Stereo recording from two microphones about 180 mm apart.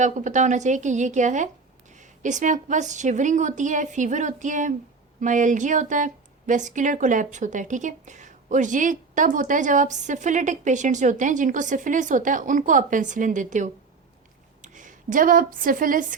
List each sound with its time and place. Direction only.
0.0 s speech: 45° right (ahead or behind)